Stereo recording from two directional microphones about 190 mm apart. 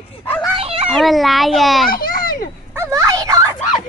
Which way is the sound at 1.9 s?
50° left (ahead or behind).